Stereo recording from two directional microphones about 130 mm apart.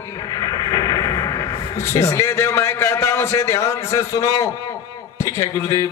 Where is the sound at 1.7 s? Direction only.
25° left (ahead or behind).